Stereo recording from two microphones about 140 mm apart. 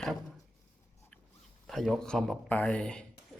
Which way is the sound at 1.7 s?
Centre (ahead or behind).